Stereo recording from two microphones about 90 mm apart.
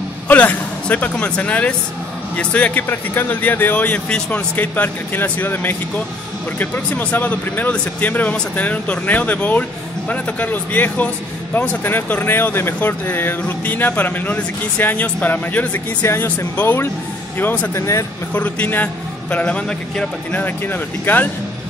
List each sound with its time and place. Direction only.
0.3 s a man's voice: 15° left (ahead or behind)
17.7 s speech: 35° left (ahead or behind)
18.3 s speech: 20° left (ahead or behind)